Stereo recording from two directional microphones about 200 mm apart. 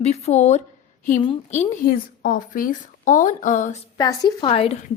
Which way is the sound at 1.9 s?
45° left (ahead or behind).